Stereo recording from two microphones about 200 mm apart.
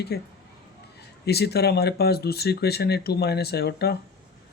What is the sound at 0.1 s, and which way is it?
Speech, 50° left (ahead or behind).